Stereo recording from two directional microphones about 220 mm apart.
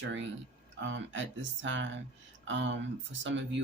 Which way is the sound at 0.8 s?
55° right (ahead or behind).